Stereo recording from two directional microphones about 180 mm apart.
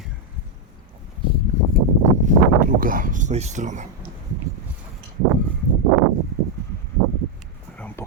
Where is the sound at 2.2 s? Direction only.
50° right (ahead or behind).